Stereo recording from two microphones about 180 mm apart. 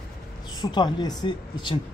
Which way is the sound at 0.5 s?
25° left (ahead or behind).